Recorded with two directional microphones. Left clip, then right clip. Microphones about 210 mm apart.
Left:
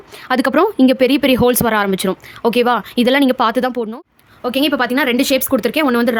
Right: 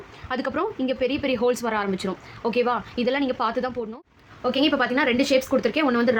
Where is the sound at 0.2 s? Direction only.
55° left (ahead or behind).